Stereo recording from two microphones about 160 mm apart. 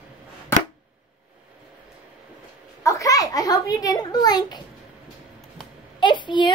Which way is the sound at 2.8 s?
20° left (ahead or behind).